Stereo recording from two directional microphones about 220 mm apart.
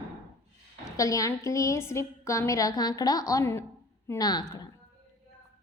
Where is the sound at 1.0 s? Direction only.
15° left (ahead or behind).